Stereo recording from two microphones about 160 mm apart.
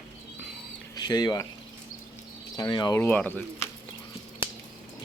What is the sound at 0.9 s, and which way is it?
Speech, 25° left (ahead or behind).